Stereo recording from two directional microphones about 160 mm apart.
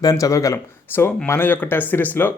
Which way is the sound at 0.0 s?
20° left (ahead or behind).